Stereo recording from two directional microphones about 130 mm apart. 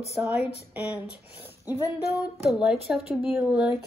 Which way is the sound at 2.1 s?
Centre (ahead or behind).